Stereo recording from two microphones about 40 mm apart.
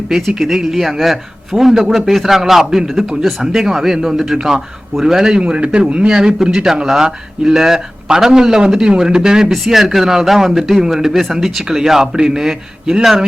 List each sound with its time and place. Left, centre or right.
0.1 s a man's voice: centre
5.4 s speech: right
6.1 s speech: centre